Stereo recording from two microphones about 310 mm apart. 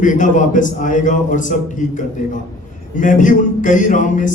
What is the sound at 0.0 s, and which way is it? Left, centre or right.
Speech, left.